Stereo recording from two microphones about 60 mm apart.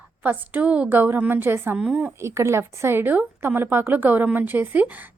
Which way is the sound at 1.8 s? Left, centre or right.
Centre.